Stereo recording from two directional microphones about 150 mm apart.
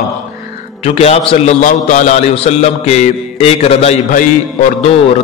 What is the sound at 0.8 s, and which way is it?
Speech, 45° left (ahead or behind).